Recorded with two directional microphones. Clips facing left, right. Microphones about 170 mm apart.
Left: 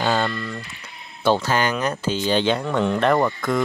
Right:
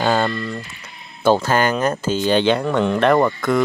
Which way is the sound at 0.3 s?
30° right (ahead or behind).